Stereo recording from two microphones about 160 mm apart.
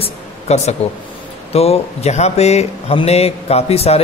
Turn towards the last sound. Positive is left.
turn(degrees=40)  # may be behind; listen again after turning